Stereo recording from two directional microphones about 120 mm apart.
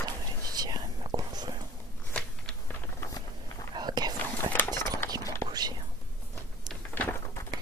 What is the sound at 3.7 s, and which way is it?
Whispering, 35° right (ahead or behind).